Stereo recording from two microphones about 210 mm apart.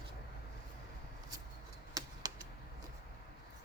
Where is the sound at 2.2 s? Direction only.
20° right (ahead or behind).